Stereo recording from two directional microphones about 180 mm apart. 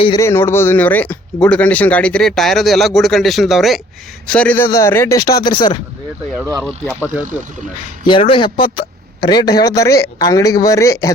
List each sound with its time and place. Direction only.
0.2 s speech: 15° left (ahead or behind)
6.6 s speech: centre (ahead or behind)
8.0 s speech: 30° left (ahead or behind)